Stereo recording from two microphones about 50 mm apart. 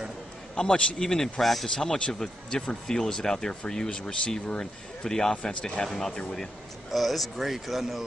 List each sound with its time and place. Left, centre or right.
0.6 s speech: centre
5.8 s speech: centre